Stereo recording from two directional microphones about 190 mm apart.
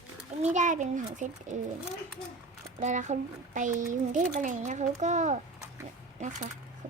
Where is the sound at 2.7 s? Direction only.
40° right (ahead or behind).